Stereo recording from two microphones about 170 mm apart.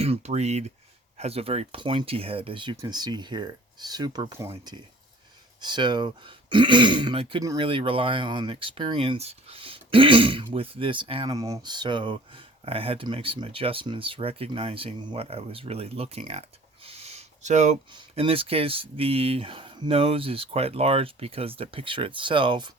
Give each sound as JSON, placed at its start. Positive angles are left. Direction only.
{"t": 0.0, "sound": "speech", "side_deg": -40}
{"t": 16.8, "sound": "a sound", "side_deg": -35}
{"t": 17.9, "sound": "speech", "side_deg": -35}